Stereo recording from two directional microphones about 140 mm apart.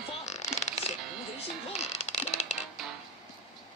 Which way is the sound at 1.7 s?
55° left (ahead or behind).